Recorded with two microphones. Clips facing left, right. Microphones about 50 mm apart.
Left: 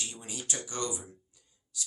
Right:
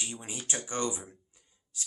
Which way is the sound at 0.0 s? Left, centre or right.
Right.